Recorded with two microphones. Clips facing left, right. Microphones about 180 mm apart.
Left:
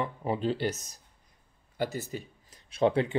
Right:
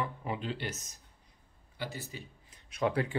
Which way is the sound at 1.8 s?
45° left (ahead or behind).